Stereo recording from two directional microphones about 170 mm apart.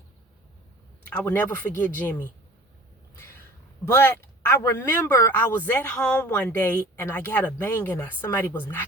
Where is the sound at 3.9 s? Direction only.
10° left (ahead or behind).